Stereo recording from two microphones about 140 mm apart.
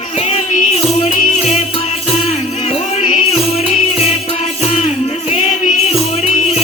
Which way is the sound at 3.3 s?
45° left (ahead or behind).